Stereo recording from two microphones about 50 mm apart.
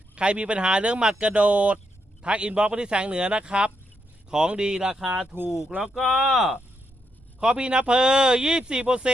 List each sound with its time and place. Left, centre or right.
0.2 s a man's voice: right
5.3 s speech: left
5.8 s speech: centre
7.3 s a man's voice: centre